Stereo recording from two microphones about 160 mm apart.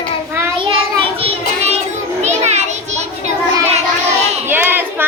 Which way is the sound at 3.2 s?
45° right (ahead or behind).